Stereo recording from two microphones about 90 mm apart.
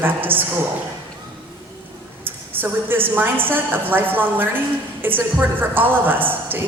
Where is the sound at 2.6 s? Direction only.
25° right (ahead or behind).